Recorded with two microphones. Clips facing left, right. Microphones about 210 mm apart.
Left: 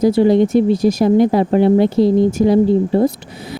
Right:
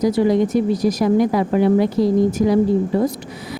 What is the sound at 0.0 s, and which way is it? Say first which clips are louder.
Speech: left 4 dB; 30° left (ahead or behind).